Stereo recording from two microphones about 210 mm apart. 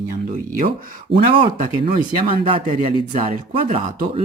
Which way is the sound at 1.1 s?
55° right (ahead or behind).